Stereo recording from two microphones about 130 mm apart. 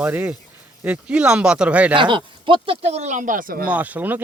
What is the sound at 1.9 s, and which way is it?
Speech, 40° right (ahead or behind).